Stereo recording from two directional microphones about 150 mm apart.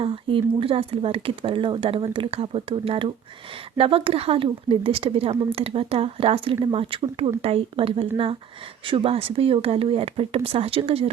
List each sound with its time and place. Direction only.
0.0 s speech: 35° right (ahead or behind)